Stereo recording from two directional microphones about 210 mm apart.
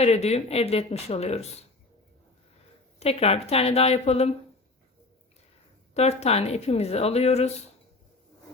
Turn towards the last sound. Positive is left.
turn(degrees=30)  # may be behind; listen again after turning